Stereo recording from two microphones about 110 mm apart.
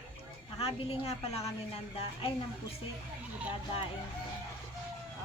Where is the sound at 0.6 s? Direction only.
60° left (ahead or behind).